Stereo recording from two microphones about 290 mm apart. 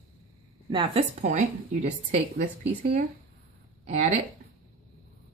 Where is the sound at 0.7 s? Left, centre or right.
Centre.